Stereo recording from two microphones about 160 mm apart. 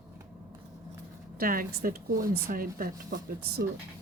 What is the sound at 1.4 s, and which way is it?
Speech, 60° right (ahead or behind).